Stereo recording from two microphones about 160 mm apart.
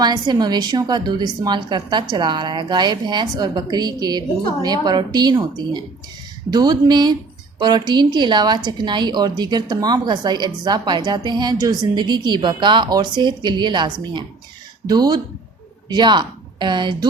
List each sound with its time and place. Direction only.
0.0 s a woman's voice: 25° right (ahead or behind)